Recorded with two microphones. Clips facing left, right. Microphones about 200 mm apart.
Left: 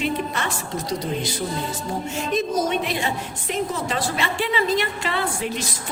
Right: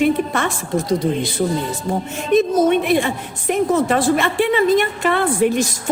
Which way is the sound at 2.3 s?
55° right (ahead or behind).